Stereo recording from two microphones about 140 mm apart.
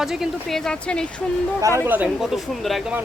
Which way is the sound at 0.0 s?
5° right (ahead or behind).